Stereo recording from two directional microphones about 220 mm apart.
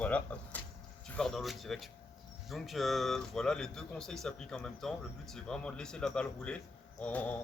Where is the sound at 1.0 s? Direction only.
5° left (ahead or behind).